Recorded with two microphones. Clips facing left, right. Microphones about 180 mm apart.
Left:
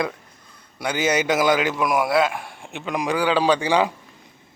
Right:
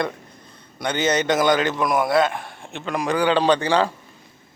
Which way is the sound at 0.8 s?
5° left (ahead or behind).